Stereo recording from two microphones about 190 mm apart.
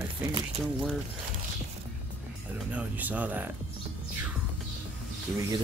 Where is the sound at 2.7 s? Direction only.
10° right (ahead or behind).